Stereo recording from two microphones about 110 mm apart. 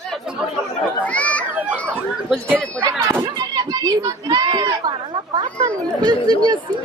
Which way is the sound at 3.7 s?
35° right (ahead or behind).